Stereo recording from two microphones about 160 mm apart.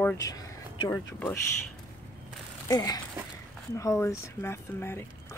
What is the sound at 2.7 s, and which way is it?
Speech, 20° left (ahead or behind).